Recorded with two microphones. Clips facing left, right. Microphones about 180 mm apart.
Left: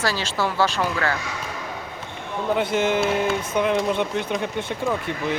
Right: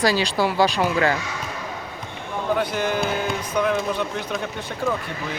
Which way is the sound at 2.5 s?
25° left (ahead or behind).